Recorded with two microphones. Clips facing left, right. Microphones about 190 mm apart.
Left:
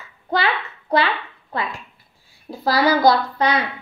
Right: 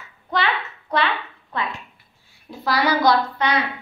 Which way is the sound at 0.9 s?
30° left (ahead or behind).